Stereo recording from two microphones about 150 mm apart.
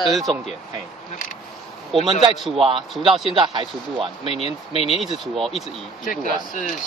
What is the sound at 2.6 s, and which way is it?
Speech, 35° right (ahead or behind).